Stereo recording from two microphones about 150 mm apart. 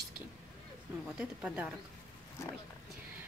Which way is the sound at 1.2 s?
5° right (ahead or behind).